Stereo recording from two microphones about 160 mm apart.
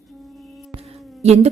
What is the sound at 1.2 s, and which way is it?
Speech, 45° right (ahead or behind).